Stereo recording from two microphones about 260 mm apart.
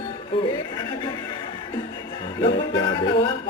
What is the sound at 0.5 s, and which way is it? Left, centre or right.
Chuckle, centre.